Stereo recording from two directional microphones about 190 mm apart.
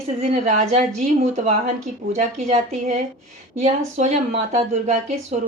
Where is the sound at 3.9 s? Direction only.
35° right (ahead or behind).